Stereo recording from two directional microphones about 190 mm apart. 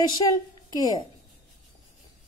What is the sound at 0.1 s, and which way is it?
Speech, 20° left (ahead or behind).